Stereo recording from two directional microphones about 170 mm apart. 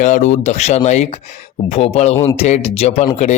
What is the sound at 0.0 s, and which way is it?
Speech, 45° left (ahead or behind).